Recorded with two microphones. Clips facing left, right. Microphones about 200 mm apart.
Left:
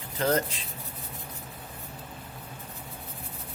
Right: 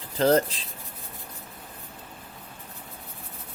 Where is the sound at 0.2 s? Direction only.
35° right (ahead or behind).